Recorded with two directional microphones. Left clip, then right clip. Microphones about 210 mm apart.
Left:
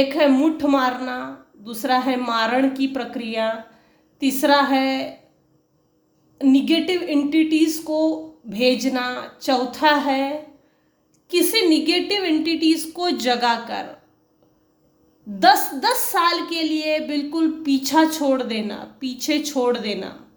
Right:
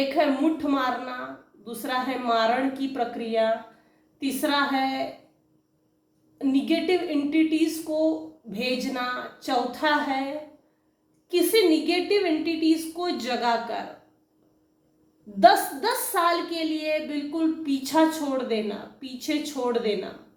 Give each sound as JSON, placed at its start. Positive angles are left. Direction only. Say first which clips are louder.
{"t": 0.1, "sound": "a woman's voice", "louder": "left 5 dB", "side_deg": 50}
{"t": 6.5, "sound": "a woman's voice", "louder": "left 5 dB", "side_deg": 50}
{"t": 11.3, "sound": "a woman's voice", "louder": "left 3 dB", "side_deg": 50}
{"t": 15.4, "sound": "a woman's voice", "louder": "left 2 dB", "side_deg": 50}